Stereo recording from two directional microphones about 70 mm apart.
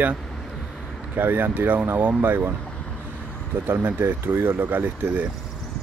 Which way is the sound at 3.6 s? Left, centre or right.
Right.